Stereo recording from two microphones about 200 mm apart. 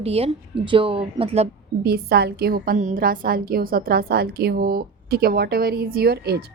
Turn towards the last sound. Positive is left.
turn(degrees=-55)  # may be behind; listen again after turning